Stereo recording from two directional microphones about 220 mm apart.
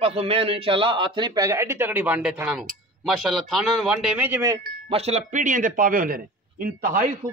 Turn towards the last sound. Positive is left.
turn(degrees=-40)  # may be behind; listen again after turning